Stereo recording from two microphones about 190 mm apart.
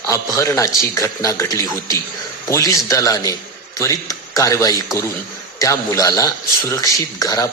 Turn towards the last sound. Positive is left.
turn(degrees=20)  # may be behind; listen again after turning